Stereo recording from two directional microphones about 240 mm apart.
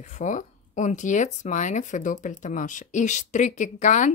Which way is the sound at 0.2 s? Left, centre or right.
Left.